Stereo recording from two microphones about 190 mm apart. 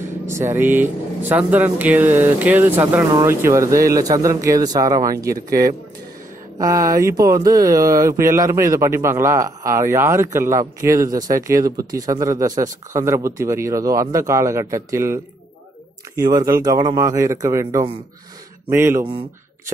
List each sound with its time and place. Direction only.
0.3 s speech: 15° right (ahead or behind)
6.6 s speech: 20° right (ahead or behind)
16.2 s speech: 20° right (ahead or behind)